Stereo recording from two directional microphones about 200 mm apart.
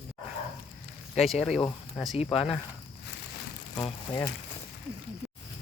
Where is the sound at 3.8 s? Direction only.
20° left (ahead or behind).